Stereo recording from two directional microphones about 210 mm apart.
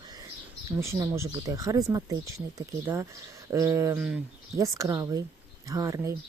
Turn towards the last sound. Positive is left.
turn(degrees=-15)  # may be behind; listen again after turning